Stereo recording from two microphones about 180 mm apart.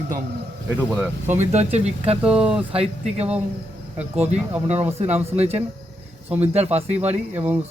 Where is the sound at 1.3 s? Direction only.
40° right (ahead or behind).